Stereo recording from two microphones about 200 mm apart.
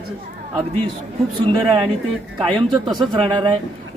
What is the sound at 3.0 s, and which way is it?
Speech, 25° right (ahead or behind).